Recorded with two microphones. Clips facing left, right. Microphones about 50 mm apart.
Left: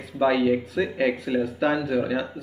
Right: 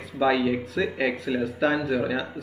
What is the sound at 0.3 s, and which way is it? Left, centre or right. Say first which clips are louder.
Speech: left 1 dB; left.